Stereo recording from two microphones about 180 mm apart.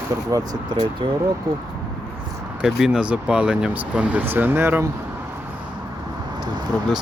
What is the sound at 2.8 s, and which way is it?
Speech, 5° right (ahead or behind).